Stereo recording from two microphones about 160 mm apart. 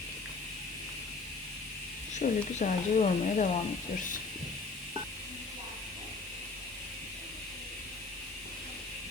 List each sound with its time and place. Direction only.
2.1 s speech: 50° left (ahead or behind)